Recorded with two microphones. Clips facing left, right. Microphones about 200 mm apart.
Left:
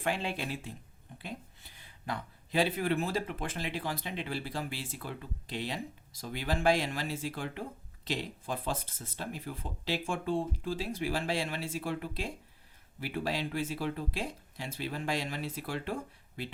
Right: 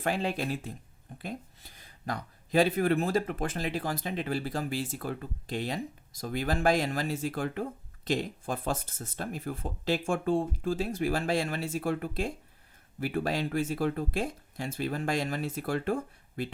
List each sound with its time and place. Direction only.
0.0 s speech: 40° right (ahead or behind)